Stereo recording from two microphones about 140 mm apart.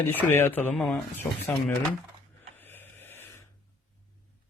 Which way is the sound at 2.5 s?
15° left (ahead or behind).